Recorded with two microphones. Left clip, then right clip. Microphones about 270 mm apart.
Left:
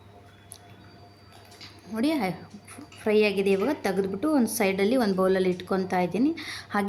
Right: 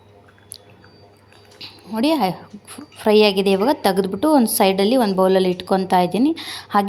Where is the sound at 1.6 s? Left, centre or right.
Centre.